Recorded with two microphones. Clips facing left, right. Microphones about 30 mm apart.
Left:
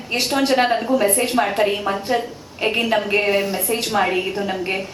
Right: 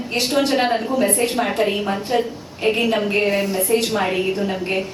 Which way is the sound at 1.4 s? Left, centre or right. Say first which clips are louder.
Left 2 dB; left.